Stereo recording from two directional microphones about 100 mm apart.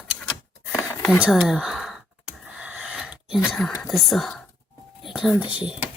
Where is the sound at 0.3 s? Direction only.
Centre (ahead or behind).